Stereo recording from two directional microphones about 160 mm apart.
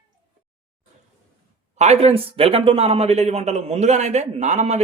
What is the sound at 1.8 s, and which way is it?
A man's voice, 40° right (ahead or behind).